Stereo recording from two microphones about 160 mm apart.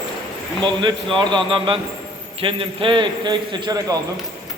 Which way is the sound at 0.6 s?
30° right (ahead or behind).